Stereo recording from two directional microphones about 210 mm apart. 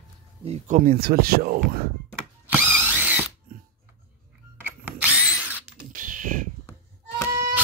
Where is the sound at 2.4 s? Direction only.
5° right (ahead or behind).